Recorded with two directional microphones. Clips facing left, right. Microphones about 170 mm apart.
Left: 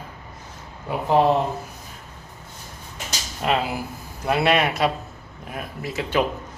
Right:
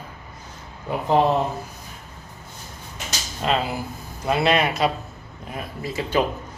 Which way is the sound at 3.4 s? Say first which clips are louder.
Even; 5° left (ahead or behind).